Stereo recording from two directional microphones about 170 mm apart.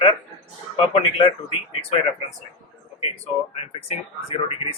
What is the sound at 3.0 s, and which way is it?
Speech, 40° left (ahead or behind).